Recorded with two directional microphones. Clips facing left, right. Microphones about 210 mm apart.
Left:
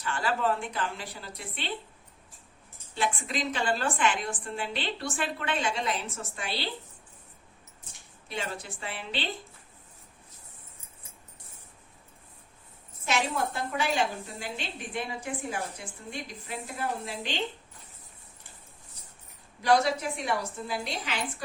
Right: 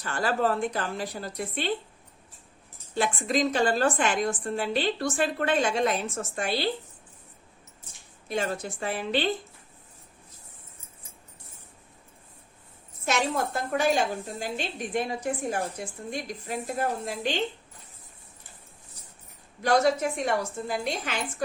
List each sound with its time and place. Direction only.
0.0 s a woman's voice: 40° right (ahead or behind)
2.9 s a woman's voice: 45° right (ahead or behind)
8.3 s a woman's voice: 45° right (ahead or behind)
13.1 s a woman's voice: 45° right (ahead or behind)
19.6 s a woman's voice: 45° right (ahead or behind)